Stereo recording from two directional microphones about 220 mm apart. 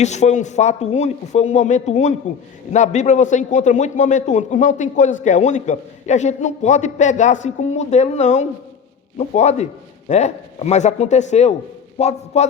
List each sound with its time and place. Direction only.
0.0 s a man's voice: 30° left (ahead or behind)